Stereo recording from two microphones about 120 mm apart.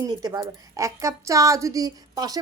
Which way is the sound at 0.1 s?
35° right (ahead or behind).